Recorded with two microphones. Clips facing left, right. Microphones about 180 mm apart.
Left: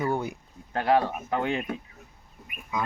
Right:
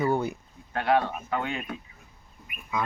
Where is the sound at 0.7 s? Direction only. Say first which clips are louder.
Left 1 dB; 35° left (ahead or behind).